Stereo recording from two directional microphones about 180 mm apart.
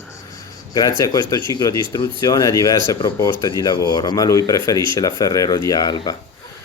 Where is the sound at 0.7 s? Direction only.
20° left (ahead or behind).